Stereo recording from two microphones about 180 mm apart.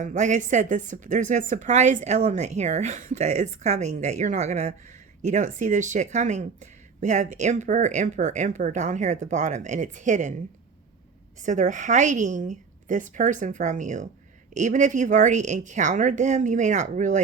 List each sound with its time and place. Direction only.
0.0 s a woman's voice: 40° right (ahead or behind)
11.3 s a woman's voice: 45° right (ahead or behind)